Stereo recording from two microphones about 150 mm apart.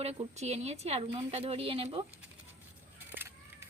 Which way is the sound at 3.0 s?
15° right (ahead or behind).